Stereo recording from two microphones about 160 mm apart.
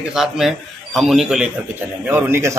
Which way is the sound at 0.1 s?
Centre (ahead or behind).